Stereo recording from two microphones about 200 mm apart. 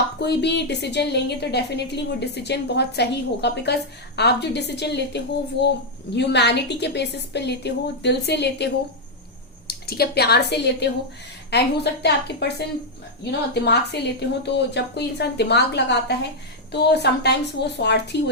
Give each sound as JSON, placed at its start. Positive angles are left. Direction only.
{"t": 0.2, "sound": "a woman's voice", "side_deg": 55}